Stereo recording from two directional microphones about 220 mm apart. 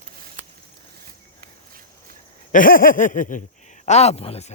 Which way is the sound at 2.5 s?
40° left (ahead or behind).